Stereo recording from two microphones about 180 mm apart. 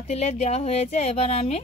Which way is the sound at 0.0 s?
35° left (ahead or behind).